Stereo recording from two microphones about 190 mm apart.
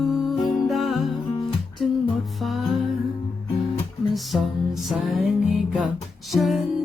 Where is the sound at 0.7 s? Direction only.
Centre (ahead or behind).